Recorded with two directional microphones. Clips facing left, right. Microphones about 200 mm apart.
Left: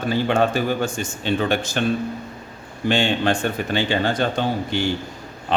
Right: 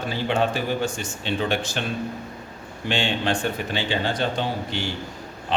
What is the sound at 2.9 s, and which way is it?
A man's voice, 45° left (ahead or behind).